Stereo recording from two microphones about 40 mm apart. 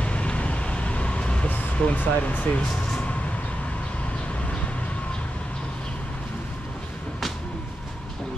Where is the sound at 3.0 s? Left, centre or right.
Left.